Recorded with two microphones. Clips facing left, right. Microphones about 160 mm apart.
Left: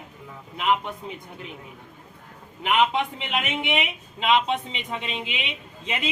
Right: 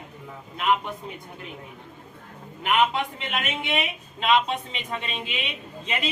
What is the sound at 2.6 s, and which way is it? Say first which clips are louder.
A man's voice: left 1 dB; 20° left (ahead or behind).